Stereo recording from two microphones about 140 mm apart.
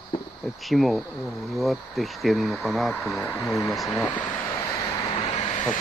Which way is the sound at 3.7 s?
Centre (ahead or behind).